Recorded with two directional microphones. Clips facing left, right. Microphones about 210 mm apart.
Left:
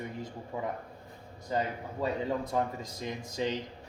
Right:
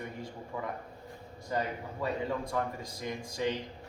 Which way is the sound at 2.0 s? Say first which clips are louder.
Left 2 dB; 25° left (ahead or behind).